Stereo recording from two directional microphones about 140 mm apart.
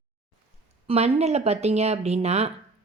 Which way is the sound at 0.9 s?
50° right (ahead or behind).